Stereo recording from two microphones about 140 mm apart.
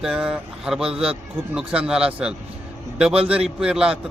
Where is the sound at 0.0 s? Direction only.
5° right (ahead or behind).